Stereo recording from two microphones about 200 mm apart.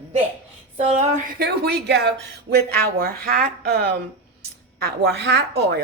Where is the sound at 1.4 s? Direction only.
55° right (ahead or behind).